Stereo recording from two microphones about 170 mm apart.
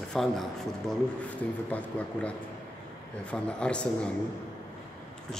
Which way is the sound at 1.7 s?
10° left (ahead or behind).